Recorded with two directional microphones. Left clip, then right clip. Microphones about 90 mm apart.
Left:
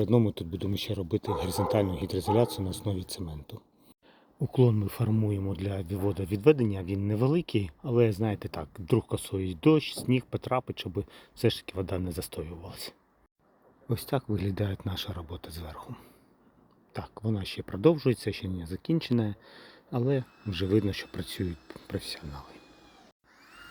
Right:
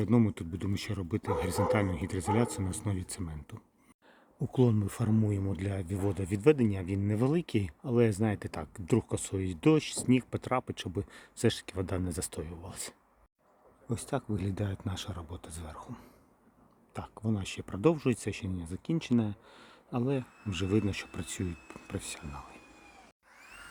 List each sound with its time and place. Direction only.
0.0 s speech: 20° right (ahead or behind)
4.4 s speech: 5° right (ahead or behind)
13.8 s speech: 10° left (ahead or behind)
16.9 s speech: centre (ahead or behind)
23.4 s a sound: centre (ahead or behind)